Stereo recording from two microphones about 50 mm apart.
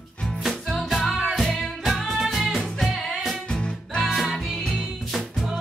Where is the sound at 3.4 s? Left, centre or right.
Centre.